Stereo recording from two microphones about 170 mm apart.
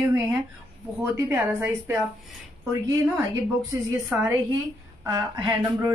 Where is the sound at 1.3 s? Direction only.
10° right (ahead or behind).